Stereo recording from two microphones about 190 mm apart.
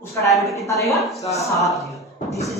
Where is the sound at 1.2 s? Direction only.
15° left (ahead or behind).